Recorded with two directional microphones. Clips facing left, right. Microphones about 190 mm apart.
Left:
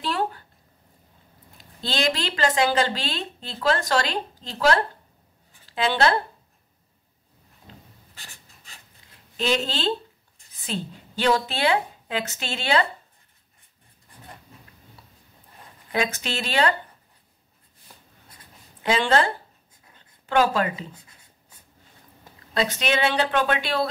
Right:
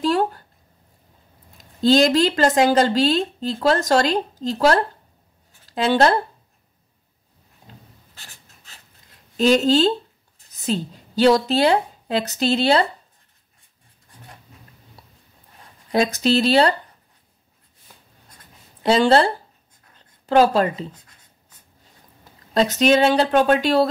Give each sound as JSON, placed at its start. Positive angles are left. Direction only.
{"t": 0.0, "sound": "a sound", "side_deg": -45}
{"t": 1.6, "sound": "speech", "side_deg": -40}
{"t": 9.4, "sound": "a woman's voice", "side_deg": -40}
{"t": 15.9, "sound": "speech", "side_deg": -35}
{"t": 18.8, "sound": "speech", "side_deg": -35}
{"t": 20.9, "sound": "writing", "side_deg": 10}
{"t": 22.5, "sound": "speech", "side_deg": -40}